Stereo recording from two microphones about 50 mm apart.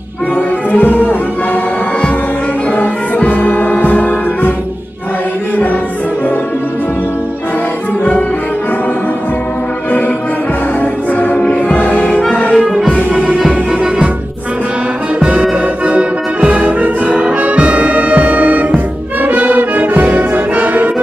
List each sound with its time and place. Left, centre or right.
0.7 s music: left
2.7 s music: left
10.8 s music: left
13.1 s music: centre
15.8 s music: right
17.2 s brass instrument: right